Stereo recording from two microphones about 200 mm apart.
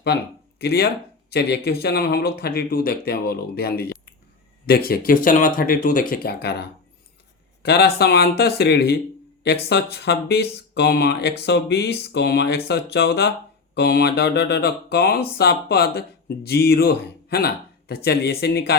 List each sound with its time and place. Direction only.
0.6 s speech: 55° left (ahead or behind)